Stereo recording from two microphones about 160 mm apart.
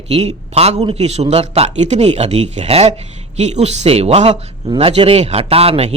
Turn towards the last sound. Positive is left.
turn(degrees=-40)  # may be behind; listen again after turning